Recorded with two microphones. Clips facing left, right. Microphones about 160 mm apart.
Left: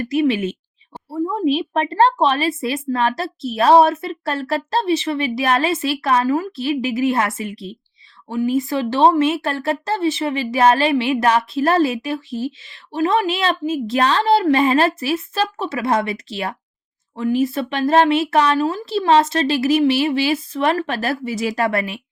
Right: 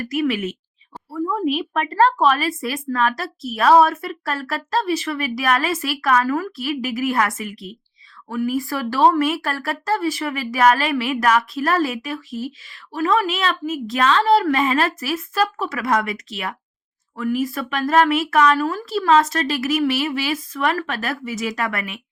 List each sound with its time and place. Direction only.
0.0 s speech: 25° left (ahead or behind)